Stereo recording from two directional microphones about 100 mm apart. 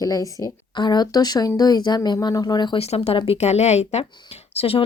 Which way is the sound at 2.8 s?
90° left.